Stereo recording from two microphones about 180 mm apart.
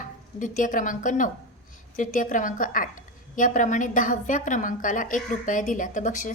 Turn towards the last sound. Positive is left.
turn(degrees=45)  # may be behind; listen again after turning